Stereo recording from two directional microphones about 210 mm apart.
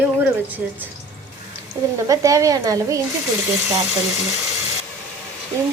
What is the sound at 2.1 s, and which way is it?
Speech, 15° right (ahead or behind).